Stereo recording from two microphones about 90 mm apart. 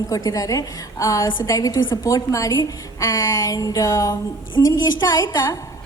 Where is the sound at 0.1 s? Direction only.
40° left (ahead or behind).